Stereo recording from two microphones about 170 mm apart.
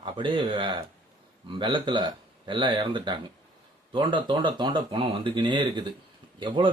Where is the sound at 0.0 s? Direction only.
30° right (ahead or behind).